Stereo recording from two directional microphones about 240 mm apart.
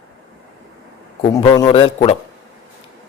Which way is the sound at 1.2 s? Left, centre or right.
Centre.